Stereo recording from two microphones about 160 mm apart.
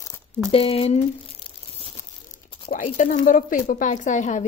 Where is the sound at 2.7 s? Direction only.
55° left (ahead or behind).